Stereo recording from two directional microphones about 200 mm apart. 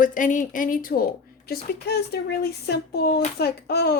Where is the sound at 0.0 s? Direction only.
40° left (ahead or behind).